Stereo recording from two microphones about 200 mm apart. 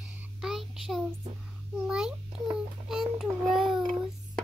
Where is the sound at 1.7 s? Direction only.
5° right (ahead or behind).